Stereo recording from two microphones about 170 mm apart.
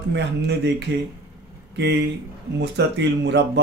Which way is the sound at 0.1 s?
90° right.